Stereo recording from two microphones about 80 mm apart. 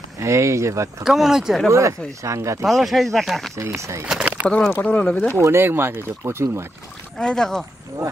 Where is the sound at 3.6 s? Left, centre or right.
Right.